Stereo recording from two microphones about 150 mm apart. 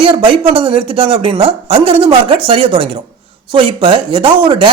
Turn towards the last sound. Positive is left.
turn(degrees=-35)  # may be behind; listen again after turning